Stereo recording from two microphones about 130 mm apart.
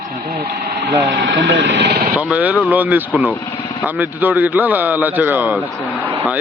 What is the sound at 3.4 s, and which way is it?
Speech, 40° left (ahead or behind).